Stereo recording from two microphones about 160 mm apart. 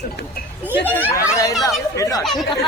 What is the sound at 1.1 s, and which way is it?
Speech, 20° left (ahead or behind).